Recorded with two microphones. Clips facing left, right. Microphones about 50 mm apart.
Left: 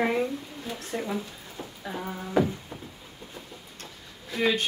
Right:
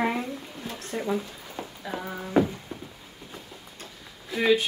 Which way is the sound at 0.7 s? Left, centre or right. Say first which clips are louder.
Right 2 dB; centre.